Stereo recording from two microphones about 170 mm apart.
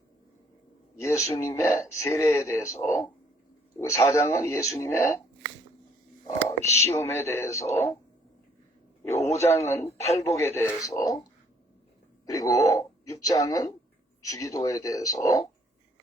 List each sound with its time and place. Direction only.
0.9 s speech: 15° left (ahead or behind)
6.6 s speech: 40° right (ahead or behind)
6.9 s speech: 15° left (ahead or behind)
9.3 s speech: 15° left (ahead or behind)